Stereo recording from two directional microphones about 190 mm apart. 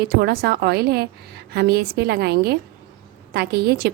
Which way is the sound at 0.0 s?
55° right (ahead or behind).